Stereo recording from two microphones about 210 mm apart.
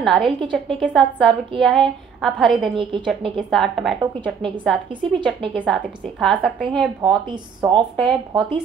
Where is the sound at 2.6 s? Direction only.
25° right (ahead or behind).